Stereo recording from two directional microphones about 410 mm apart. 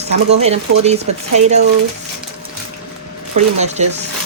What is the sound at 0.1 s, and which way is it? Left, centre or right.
Speech, centre.